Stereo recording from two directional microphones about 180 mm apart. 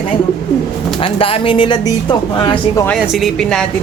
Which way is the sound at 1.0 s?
30° left (ahead or behind).